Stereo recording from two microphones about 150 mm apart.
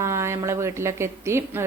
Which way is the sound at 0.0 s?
20° right (ahead or behind).